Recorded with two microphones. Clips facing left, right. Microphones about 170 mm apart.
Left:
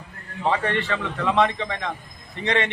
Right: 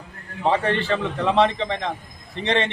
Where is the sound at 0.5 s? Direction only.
30° right (ahead or behind).